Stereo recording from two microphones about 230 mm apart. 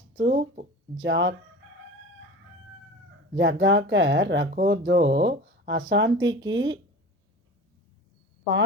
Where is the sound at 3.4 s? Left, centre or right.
Right.